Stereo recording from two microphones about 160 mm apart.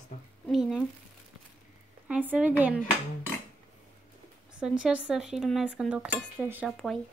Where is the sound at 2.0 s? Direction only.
10° right (ahead or behind).